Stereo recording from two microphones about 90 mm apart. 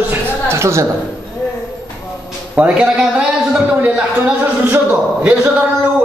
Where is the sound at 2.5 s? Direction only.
10° right (ahead or behind).